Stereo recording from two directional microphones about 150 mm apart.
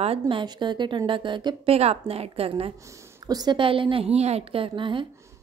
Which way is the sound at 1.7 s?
40° right (ahead or behind).